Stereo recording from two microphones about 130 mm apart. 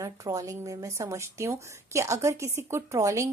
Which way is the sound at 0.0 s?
25° right (ahead or behind).